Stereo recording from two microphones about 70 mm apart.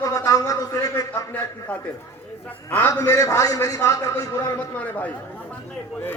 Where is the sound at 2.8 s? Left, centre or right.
Left.